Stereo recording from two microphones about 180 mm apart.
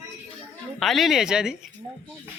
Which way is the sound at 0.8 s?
Centre (ahead or behind).